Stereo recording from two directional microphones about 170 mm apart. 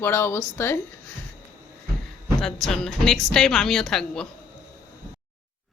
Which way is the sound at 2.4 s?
Centre (ahead or behind).